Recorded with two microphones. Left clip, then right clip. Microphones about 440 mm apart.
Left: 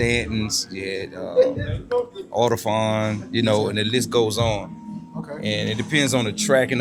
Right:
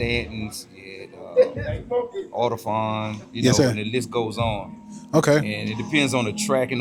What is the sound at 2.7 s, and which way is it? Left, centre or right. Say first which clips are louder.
Speech: left 3 dB; centre.